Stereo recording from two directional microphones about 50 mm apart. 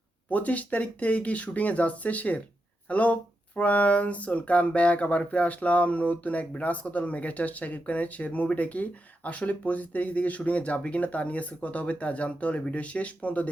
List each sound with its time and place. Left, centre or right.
0.3 s speech: left